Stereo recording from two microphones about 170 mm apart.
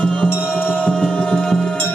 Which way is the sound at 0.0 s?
5° left (ahead or behind).